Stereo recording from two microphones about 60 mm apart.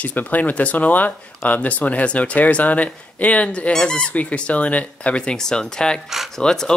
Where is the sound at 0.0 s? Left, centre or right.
Left; by 6.0 s centre.